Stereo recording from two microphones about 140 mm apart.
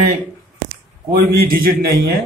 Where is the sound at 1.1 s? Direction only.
90° right.